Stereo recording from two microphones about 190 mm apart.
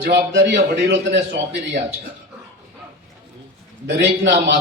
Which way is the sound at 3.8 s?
70° right (ahead or behind).